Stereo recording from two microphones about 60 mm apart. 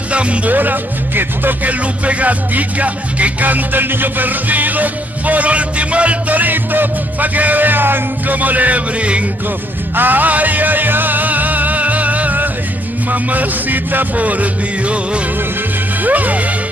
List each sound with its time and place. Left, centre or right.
0.1 s music: right